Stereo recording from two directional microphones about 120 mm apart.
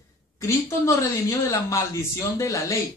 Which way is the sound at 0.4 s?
25° left (ahead or behind).